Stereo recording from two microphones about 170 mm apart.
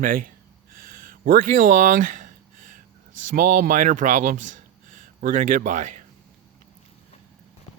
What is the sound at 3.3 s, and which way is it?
Speech, 55° right (ahead or behind).